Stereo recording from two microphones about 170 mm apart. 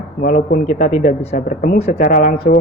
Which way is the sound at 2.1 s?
55° left (ahead or behind).